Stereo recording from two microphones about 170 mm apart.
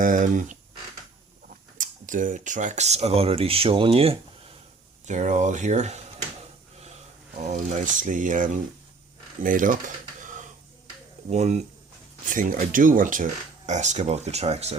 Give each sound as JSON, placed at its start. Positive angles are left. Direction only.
{"t": 0.0, "sound": "speech", "side_deg": -50}
{"t": 1.8, "sound": "speech", "side_deg": -50}
{"t": 7.3, "sound": "speech", "side_deg": -45}
{"t": 12.3, "sound": "speech", "side_deg": -50}